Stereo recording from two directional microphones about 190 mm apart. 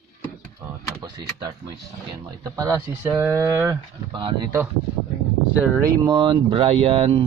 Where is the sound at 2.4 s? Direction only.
20° right (ahead or behind).